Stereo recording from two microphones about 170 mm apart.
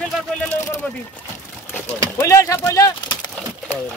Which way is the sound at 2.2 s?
20° left (ahead or behind).